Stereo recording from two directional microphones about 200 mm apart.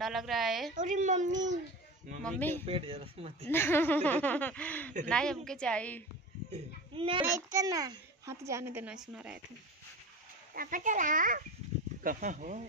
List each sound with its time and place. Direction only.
0.0 s a woman's voice: centre (ahead or behind)
0.7 s a child's voice: 40° right (ahead or behind)
2.2 s speech: 10° left (ahead or behind)
2.6 s speech: 30° right (ahead or behind)
3.4 s a woman's voice: 10° left (ahead or behind)
6.5 s speech: 25° right (ahead or behind)
7.5 s a child's voice: 15° right (ahead or behind)
10.5 s a child's voice: 45° right (ahead or behind)